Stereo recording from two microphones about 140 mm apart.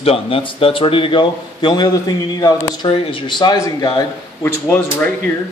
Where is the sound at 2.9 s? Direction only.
40° left (ahead or behind).